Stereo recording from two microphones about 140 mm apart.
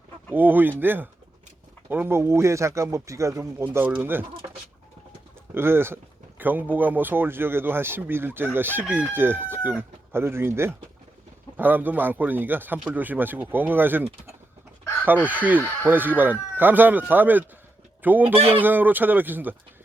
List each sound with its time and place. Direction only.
0.3 s speech: 15° right (ahead or behind)
5.5 s speech: 15° right (ahead or behind)